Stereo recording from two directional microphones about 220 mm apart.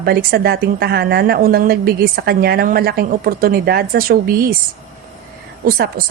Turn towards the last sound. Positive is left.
turn(degrees=-45)  # may be behind; listen again after turning